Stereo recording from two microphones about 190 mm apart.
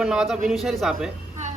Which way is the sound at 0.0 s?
5° right (ahead or behind).